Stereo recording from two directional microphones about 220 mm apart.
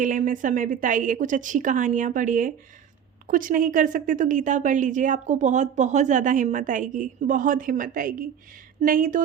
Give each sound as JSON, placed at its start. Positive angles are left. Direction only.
{"t": 0.0, "sound": "a woman's voice", "side_deg": -35}